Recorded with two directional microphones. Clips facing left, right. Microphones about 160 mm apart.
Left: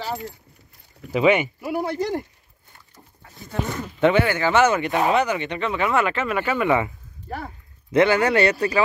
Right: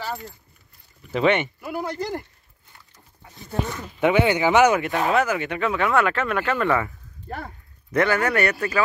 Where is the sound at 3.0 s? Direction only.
30° left (ahead or behind).